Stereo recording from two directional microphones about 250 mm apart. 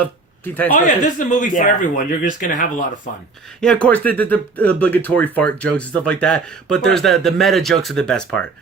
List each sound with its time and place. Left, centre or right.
0.0 s a sound: centre
1.0 s speech: left
3.6 s speech: centre